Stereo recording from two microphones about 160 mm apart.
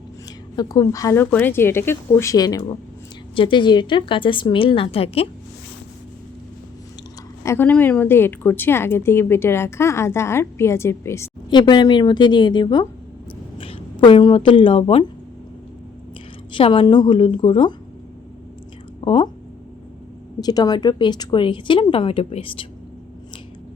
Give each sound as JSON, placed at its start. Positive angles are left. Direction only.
{"t": 0.5, "sound": "speech", "side_deg": 25}
{"t": 7.4, "sound": "a woman's voice", "side_deg": 15}
{"t": 11.5, "sound": "a woman's voice", "side_deg": 30}
{"t": 16.5, "sound": "speech", "side_deg": 30}
{"t": 19.0, "sound": "speech", "side_deg": 30}
{"t": 20.4, "sound": "speech", "side_deg": 25}